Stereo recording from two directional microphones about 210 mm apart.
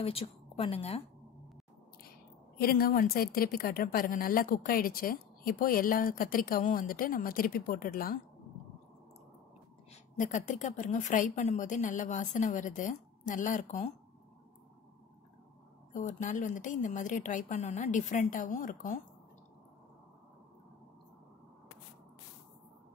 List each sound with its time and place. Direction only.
0.0 s a woman's voice: 25° left (ahead or behind)
2.6 s a woman's voice: 45° left (ahead or behind)
10.1 s a woman's voice: 35° left (ahead or behind)
16.1 s a woman's voice: 35° left (ahead or behind)